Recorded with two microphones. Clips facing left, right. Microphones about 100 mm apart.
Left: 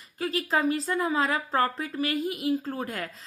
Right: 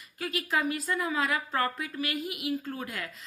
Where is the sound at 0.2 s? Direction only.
35° left (ahead or behind).